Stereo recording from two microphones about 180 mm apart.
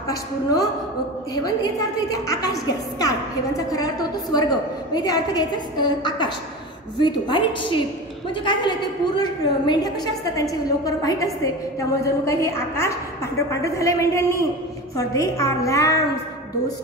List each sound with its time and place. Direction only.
1.3 s a woman's voice: 20° left (ahead or behind)